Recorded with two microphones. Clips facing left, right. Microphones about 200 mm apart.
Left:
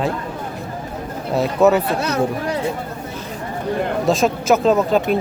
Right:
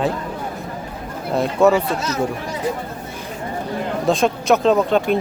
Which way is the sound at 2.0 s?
60° left (ahead or behind).